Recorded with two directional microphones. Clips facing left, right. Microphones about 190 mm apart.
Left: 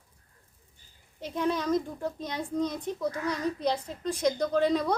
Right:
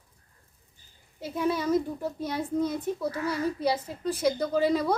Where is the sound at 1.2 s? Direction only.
5° right (ahead or behind).